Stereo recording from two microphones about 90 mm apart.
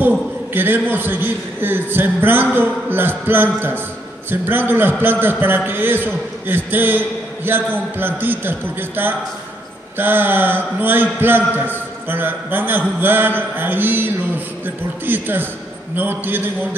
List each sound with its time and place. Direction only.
0.0 s a man's voice: 20° right (ahead or behind)